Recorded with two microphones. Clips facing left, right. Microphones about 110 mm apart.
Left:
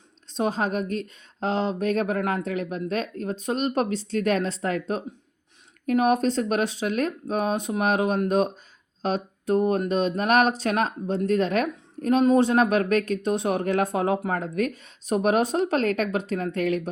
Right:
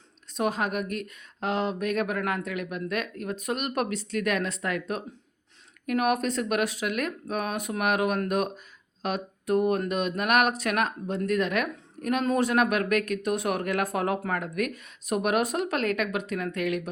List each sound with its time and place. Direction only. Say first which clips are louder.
0.3 s a woman's voice: left 2 dB; 30° left (ahead or behind)